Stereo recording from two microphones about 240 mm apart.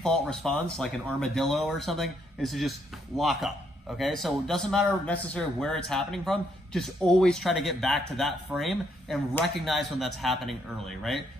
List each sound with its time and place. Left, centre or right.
0.0 s a man's voice: centre